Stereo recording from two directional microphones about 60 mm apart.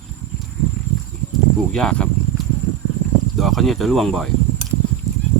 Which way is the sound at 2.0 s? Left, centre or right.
Centre.